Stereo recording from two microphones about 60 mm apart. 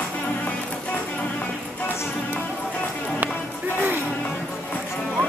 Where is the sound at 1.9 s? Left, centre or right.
Left.